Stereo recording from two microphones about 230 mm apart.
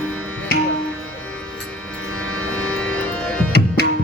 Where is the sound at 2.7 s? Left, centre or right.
Centre.